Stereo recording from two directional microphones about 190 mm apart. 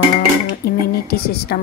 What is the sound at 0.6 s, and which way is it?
Speech, 55° left (ahead or behind).